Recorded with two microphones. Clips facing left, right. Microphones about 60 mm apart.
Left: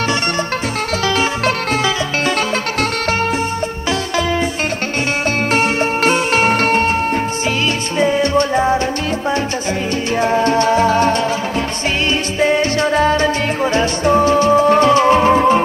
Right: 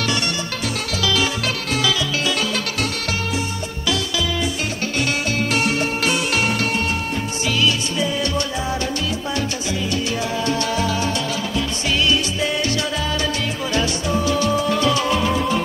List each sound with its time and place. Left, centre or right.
5.5 s music: left
8.0 s music: left
10.2 s music: left